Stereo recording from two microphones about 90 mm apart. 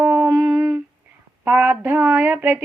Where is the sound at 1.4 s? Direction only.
20° right (ahead or behind).